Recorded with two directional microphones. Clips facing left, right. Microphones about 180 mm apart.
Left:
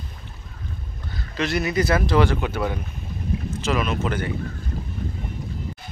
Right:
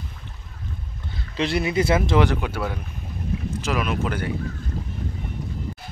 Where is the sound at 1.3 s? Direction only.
30° right (ahead or behind).